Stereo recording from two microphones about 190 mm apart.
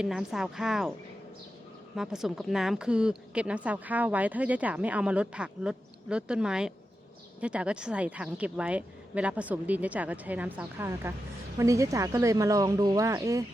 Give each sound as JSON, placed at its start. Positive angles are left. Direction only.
{"t": 0.0, "sound": "a woman's voice", "side_deg": -5}
{"t": 2.0, "sound": "a woman's voice", "side_deg": 0}